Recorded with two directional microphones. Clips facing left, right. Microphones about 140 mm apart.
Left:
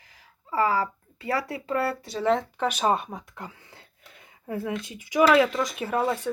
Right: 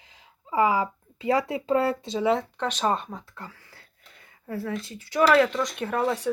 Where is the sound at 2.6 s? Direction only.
10° left (ahead or behind).